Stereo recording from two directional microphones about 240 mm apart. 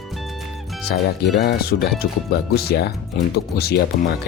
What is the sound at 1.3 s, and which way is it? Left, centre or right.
Speech, left.